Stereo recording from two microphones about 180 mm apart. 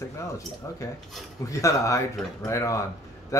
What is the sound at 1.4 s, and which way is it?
Speech, 15° left (ahead or behind).